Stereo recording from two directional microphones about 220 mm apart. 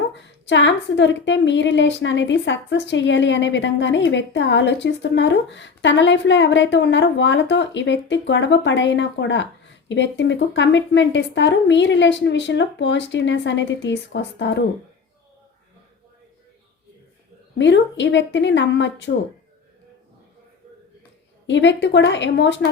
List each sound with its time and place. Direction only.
0.1 s a woman's voice: 55° left (ahead or behind)
17.6 s a woman's voice: 55° left (ahead or behind)
21.4 s speech: 55° left (ahead or behind)